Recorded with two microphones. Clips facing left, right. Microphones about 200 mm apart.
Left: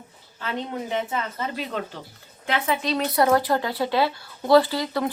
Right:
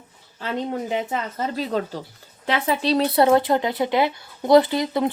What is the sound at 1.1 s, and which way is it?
Speech, 35° right (ahead or behind).